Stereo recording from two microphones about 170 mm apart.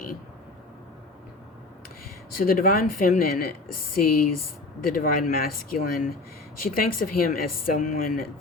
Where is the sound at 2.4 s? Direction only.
55° left (ahead or behind).